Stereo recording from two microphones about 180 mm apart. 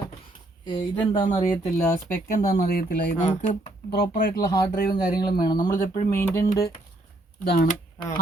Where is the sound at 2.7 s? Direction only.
60° left (ahead or behind).